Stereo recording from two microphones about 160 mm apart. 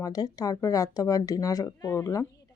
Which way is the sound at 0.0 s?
25° left (ahead or behind).